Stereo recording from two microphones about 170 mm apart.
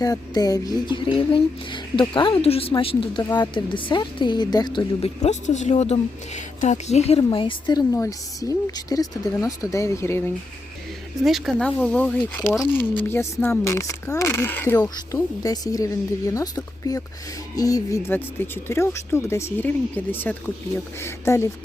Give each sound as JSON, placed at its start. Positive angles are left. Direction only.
{"t": 0.0, "sound": "speech", "side_deg": 20}
{"t": 5.2, "sound": "speech", "side_deg": 45}
{"t": 11.2, "sound": "speech", "side_deg": 0}